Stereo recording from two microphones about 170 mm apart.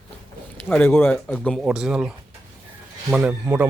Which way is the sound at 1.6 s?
5° right (ahead or behind).